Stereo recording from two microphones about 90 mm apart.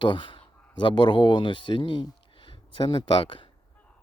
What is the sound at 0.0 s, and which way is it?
Speech, 60° left (ahead or behind).